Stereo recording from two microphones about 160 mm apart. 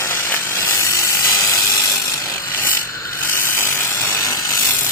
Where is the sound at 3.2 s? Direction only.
15° left (ahead or behind).